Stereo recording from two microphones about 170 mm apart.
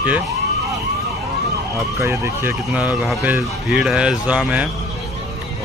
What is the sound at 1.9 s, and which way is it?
Speech, 15° right (ahead or behind).